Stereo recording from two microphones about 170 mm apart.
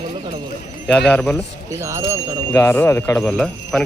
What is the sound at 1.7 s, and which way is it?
Speech, 15° right (ahead or behind).